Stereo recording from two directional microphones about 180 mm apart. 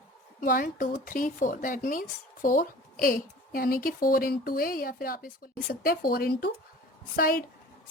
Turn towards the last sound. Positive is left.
turn(degrees=55)  # may be behind; listen again after turning